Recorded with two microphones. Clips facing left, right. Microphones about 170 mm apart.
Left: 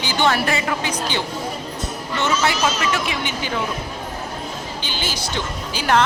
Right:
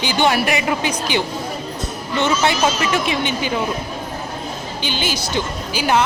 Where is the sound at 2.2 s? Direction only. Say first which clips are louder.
Right 3 dB; 25° right (ahead or behind).